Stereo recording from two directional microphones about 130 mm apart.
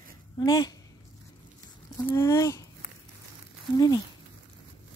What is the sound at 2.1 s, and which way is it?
Speech, 25° left (ahead or behind).